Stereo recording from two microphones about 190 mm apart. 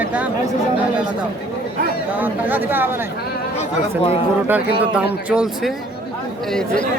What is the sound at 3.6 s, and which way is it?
Speech, 30° left (ahead or behind).